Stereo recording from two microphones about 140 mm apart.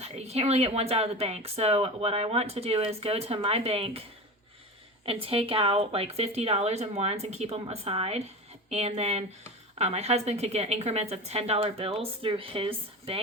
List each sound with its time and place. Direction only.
0.0 s speech: 50° right (ahead or behind)
5.0 s speech: 40° right (ahead or behind)